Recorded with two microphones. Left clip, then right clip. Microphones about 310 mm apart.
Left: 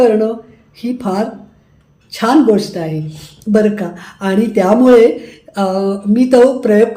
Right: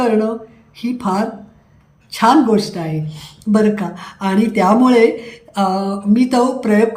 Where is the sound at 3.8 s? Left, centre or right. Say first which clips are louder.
Left 2 dB; right.